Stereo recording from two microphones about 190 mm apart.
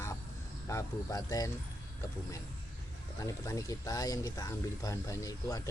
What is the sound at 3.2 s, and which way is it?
Speech, 15° left (ahead or behind).